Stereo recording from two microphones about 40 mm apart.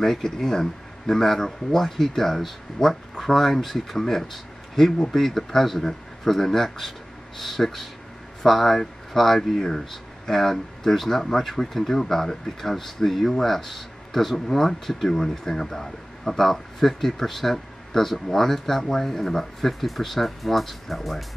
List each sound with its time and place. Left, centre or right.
0.0 s speech: centre